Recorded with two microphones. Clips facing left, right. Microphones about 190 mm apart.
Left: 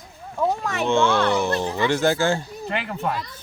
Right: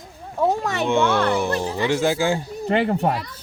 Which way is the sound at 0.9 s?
15° right (ahead or behind).